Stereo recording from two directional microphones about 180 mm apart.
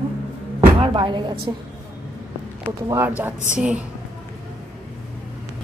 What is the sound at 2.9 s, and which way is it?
Speech, 10° right (ahead or behind).